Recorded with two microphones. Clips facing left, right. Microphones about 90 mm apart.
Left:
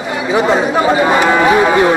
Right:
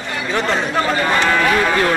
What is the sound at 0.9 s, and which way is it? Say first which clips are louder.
Speech: left 6 dB; 15° left (ahead or behind).